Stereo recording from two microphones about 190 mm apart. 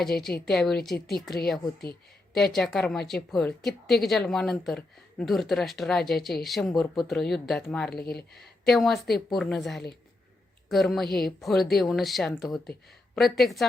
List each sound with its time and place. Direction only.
0.0 s a woman's voice: centre (ahead or behind)
2.3 s a woman's voice: centre (ahead or behind)
7.9 s speech: 55° left (ahead or behind)
8.4 s a woman's voice: centre (ahead or behind)